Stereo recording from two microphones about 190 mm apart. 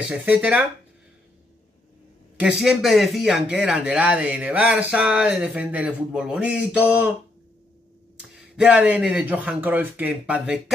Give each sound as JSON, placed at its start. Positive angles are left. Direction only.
{"t": 0.1, "sound": "speech", "side_deg": -10}
{"t": 2.3, "sound": "speech", "side_deg": -5}
{"t": 8.2, "sound": "speech", "side_deg": -5}